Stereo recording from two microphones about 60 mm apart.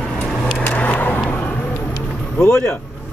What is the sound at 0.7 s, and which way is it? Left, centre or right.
Vehicle, left.